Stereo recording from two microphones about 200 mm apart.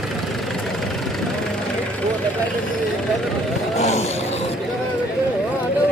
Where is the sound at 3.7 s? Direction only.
35° left (ahead or behind).